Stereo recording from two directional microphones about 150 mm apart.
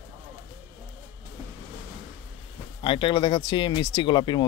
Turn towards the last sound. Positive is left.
turn(degrees=30)  # may be behind; listen again after turning